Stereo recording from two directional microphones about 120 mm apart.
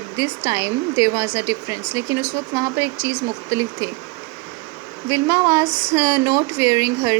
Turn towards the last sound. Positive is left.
turn(degrees=-25)  # may be behind; listen again after turning